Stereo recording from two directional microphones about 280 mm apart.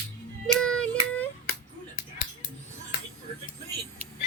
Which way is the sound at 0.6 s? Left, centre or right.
Centre.